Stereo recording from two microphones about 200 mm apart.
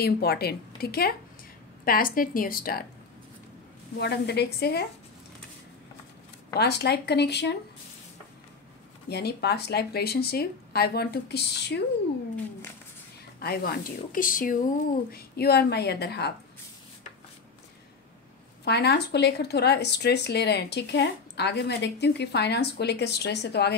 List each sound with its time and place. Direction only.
0.0 s speech: 50° left (ahead or behind)
4.0 s speech: 55° left (ahead or behind)
6.6 s speech: 55° left (ahead or behind)
9.1 s speech: 55° left (ahead or behind)
13.4 s speech: 50° left (ahead or behind)
18.6 s speech: 55° left (ahead or behind)